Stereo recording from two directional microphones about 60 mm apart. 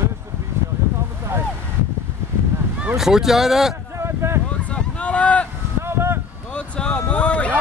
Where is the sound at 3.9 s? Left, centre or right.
Right.